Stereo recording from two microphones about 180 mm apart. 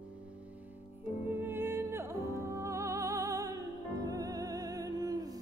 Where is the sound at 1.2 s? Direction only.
10° right (ahead or behind).